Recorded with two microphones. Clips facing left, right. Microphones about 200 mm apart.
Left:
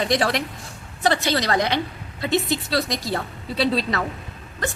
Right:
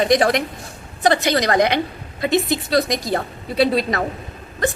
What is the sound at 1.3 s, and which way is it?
Speech, 55° right (ahead or behind).